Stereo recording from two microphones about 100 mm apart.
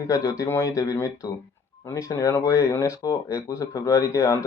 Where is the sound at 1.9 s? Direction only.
30° left (ahead or behind).